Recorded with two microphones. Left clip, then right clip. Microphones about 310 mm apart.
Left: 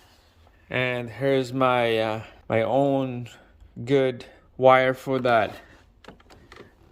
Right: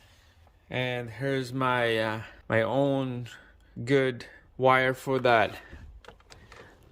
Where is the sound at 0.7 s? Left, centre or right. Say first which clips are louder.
Left 5 dB; centre.